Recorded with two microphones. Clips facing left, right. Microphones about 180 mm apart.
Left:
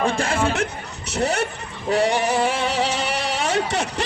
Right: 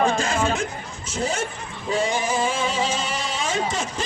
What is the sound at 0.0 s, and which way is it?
Speech, 60° left (ahead or behind).